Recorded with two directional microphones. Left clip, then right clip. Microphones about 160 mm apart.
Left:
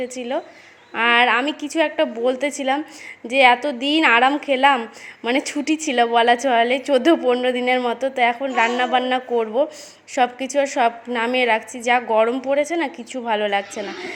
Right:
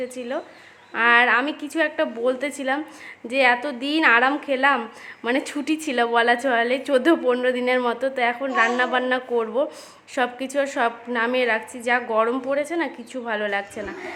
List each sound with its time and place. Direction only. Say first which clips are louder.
0.0 s a woman's voice: left 3 dB; 20° left (ahead or behind)